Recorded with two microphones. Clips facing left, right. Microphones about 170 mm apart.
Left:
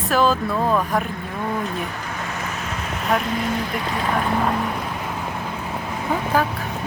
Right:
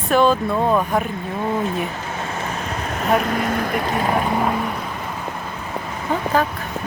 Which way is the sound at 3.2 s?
55° right (ahead or behind).